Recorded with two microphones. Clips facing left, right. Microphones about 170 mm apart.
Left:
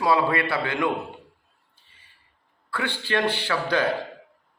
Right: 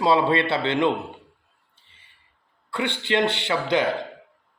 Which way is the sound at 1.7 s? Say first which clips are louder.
Right 1 dB; 20° right (ahead or behind).